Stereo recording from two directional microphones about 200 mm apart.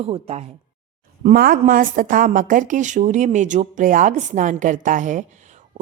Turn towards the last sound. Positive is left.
turn(degrees=-40)  # may be behind; listen again after turning